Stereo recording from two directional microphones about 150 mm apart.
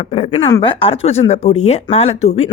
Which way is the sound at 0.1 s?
40° left (ahead or behind).